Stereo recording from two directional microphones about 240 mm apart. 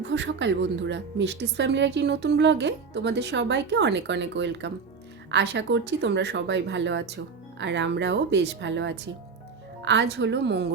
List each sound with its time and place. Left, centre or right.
0.0 s a woman's voice: right